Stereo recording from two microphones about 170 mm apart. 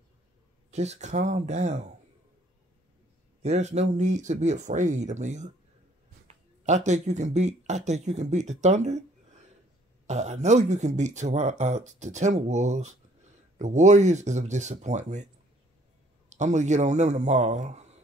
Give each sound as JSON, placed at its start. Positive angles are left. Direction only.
{"t": 0.7, "sound": "speech", "side_deg": -40}
{"t": 3.4, "sound": "speech", "side_deg": -40}
{"t": 16.3, "sound": "a man's voice", "side_deg": -45}